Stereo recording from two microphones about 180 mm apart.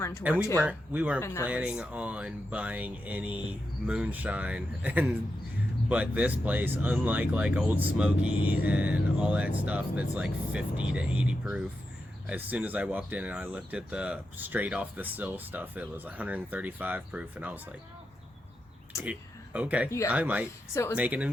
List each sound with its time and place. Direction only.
0.2 s speech: 5° right (ahead or behind)
1.2 s speech: 15° left (ahead or behind)
1.5 s speech: 5° right (ahead or behind)
18.9 s speech: 15° left (ahead or behind)
19.5 s speech: 5° right (ahead or behind)